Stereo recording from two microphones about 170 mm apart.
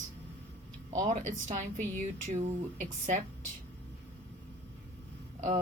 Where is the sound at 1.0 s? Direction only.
45° right (ahead or behind).